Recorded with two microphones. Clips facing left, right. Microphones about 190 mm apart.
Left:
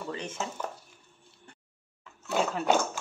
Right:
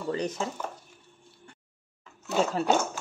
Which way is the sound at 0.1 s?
40° right (ahead or behind).